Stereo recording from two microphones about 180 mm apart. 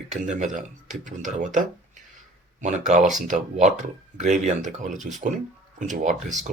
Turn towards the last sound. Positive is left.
turn(degrees=-40)  # may be behind; listen again after turning